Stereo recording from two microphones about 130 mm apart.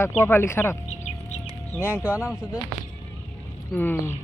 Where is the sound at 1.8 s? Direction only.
15° right (ahead or behind).